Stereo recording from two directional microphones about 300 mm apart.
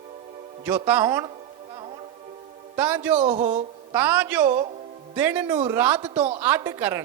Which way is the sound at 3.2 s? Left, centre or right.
Right.